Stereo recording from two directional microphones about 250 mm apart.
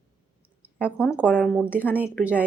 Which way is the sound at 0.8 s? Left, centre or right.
Centre.